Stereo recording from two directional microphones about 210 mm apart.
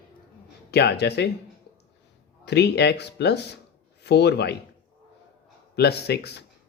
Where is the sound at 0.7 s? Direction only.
50° left (ahead or behind).